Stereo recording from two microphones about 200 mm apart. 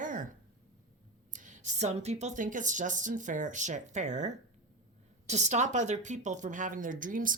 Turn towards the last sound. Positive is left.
turn(degrees=-40)  # may be behind; listen again after turning